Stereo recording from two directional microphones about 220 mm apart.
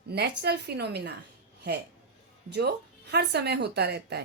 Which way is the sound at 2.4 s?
50° right (ahead or behind).